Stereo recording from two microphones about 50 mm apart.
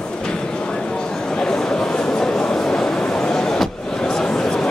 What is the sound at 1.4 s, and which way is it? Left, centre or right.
Train, centre.